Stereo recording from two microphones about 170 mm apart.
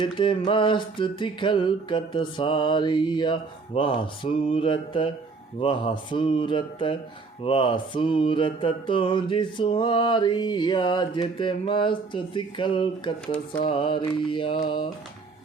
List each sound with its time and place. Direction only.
0.0 s mantra: 30° left (ahead or behind)
3.8 s speech: 30° left (ahead or behind)
5.5 s mantra: 30° left (ahead or behind)
13.2 s a sound: 5° left (ahead or behind)
13.6 s mantra: 30° left (ahead or behind)